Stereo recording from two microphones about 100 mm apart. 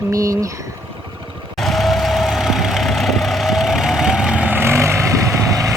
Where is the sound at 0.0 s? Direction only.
35° right (ahead or behind).